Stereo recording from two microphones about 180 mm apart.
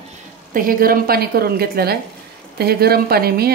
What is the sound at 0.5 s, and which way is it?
A woman's voice, 55° right (ahead or behind).